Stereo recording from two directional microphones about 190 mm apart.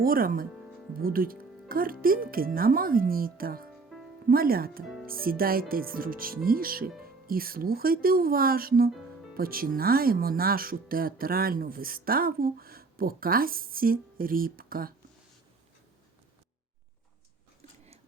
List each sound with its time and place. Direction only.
0.0 s speech: 50° right (ahead or behind)